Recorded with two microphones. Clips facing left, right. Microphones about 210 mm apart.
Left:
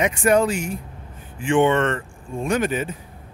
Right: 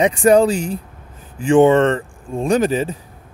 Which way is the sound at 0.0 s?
35° right (ahead or behind).